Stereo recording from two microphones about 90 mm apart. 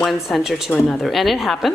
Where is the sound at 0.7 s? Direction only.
15° left (ahead or behind).